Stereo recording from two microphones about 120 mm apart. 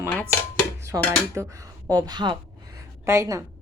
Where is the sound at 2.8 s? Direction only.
25° right (ahead or behind).